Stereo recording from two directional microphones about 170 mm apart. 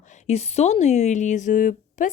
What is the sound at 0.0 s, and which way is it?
A woman's voice, 45° left (ahead or behind).